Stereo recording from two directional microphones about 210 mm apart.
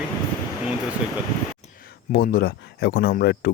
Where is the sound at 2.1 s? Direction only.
45° left (ahead or behind).